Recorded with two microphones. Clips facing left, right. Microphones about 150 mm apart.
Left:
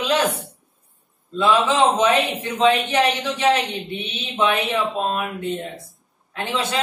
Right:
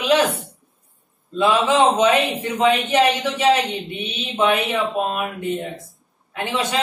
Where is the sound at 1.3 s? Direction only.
15° right (ahead or behind).